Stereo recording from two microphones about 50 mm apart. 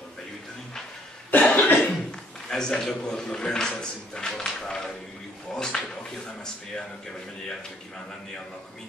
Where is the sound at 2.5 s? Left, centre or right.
Centre.